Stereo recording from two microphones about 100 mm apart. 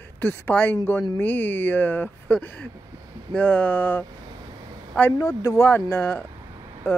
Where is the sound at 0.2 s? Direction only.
20° left (ahead or behind).